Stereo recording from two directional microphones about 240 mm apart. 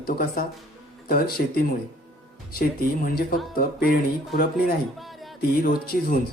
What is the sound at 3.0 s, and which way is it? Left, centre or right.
Speech, left.